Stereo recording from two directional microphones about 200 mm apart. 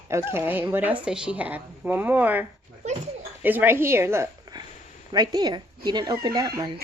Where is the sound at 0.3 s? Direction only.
10° right (ahead or behind).